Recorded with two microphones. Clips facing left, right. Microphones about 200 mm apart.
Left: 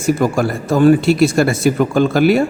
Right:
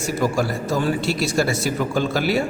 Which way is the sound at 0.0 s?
55° left (ahead or behind).